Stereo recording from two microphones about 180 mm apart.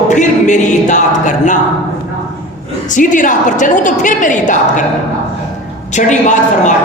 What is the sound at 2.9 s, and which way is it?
A woman's voice, 45° left (ahead or behind).